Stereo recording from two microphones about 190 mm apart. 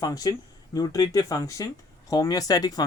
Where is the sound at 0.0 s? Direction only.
20° left (ahead or behind).